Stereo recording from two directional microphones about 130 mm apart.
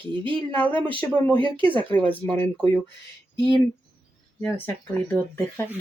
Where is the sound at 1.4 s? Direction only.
40° right (ahead or behind).